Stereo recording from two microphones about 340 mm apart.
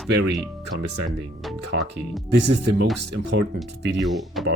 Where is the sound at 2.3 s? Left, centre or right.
Right.